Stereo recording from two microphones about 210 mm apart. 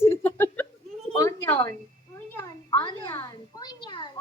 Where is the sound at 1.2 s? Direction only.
10° left (ahead or behind).